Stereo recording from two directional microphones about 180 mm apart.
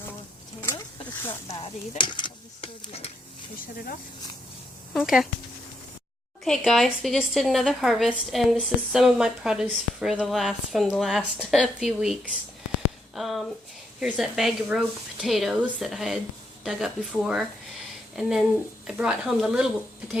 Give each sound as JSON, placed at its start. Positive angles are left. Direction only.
{"t": 1.3, "sound": "speech", "side_deg": 35}
{"t": 4.9, "sound": "speech", "side_deg": 0}
{"t": 6.4, "sound": "speech", "side_deg": 0}